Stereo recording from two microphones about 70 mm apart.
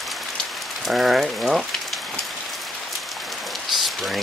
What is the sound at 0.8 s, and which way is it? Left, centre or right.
Speech, centre.